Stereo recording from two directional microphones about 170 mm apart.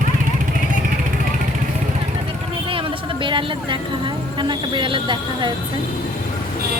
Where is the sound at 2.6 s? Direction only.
30° right (ahead or behind).